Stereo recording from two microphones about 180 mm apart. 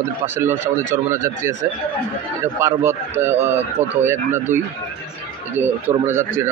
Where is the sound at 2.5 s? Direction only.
15° right (ahead or behind).